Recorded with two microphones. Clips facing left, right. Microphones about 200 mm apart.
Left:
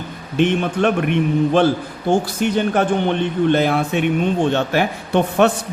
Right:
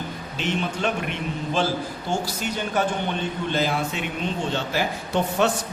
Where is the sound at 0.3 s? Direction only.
55° left (ahead or behind).